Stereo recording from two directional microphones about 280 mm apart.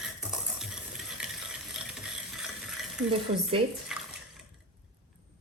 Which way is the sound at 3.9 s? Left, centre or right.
Centre.